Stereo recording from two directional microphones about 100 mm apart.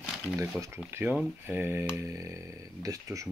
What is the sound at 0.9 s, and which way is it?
Speech, 20° right (ahead or behind).